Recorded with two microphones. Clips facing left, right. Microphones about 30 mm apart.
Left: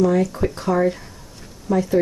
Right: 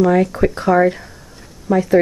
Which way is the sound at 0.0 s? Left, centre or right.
Right.